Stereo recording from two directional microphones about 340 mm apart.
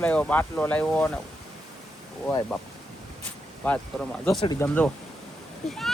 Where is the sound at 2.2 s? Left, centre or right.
Centre.